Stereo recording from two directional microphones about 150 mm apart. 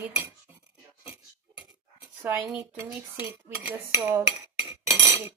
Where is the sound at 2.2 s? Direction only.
10° right (ahead or behind).